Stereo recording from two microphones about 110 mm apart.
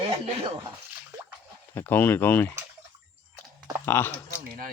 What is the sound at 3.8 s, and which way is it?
Speech, 20° left (ahead or behind).